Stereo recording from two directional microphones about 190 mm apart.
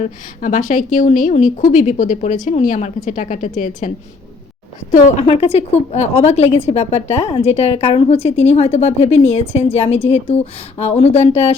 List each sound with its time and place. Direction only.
0.0 s a woman's voice: 40° left (ahead or behind)